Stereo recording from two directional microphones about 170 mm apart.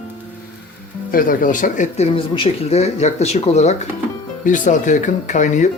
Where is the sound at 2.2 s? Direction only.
30° left (ahead or behind).